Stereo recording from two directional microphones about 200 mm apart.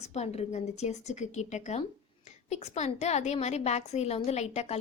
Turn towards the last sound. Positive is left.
turn(degrees=35)  # may be behind; listen again after turning